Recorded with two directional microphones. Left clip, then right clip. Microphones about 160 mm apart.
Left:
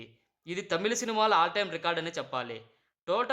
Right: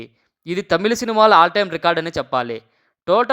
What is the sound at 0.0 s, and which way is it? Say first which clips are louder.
A man's voice: right 12 dB; 45° right (ahead or behind).